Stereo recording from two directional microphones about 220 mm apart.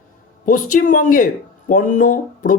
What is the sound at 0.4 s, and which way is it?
Speech, 40° left (ahead or behind).